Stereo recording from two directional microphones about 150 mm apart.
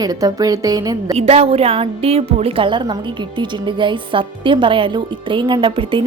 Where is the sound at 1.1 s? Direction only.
40° right (ahead or behind).